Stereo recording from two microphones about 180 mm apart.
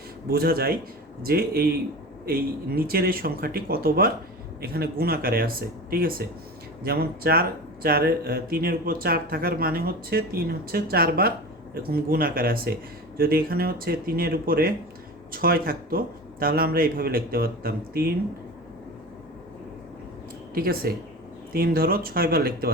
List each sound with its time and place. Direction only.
0.3 s speech: 60° right (ahead or behind)
20.5 s speech: 55° right (ahead or behind)